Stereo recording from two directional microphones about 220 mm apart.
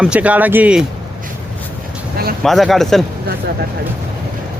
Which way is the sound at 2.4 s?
Centre (ahead or behind).